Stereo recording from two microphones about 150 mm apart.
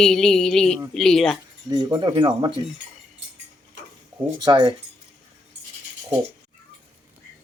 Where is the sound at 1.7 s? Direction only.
25° right (ahead or behind).